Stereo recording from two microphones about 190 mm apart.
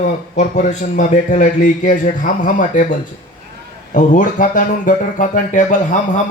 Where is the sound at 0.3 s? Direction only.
40° left (ahead or behind).